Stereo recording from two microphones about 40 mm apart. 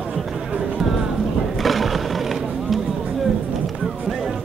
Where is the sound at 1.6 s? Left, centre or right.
Centre.